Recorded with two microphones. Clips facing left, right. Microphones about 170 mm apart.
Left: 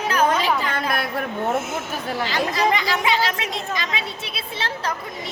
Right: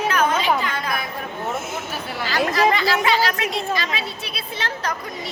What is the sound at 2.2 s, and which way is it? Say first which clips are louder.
A woman's voice: right 3 dB; 20° left (ahead or behind).